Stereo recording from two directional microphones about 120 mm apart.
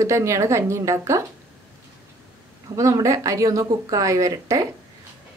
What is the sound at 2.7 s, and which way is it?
Speech, 25° right (ahead or behind).